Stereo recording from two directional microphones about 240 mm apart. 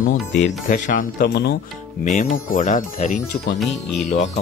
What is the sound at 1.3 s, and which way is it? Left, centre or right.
Speech, left.